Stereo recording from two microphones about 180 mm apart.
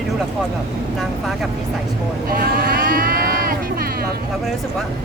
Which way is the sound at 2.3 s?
55° right (ahead or behind).